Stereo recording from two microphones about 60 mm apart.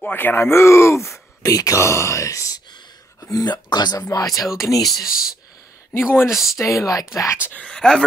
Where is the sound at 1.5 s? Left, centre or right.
Left.